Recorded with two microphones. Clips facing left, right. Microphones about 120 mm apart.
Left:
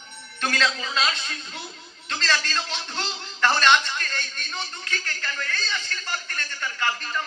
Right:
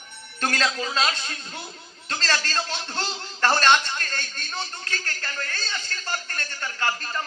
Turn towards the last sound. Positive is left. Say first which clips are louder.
# even
turn(degrees=-30)  # may be behind; listen again after turning